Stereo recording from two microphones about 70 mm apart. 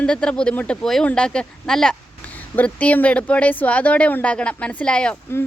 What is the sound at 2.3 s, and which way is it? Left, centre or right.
Speech, left.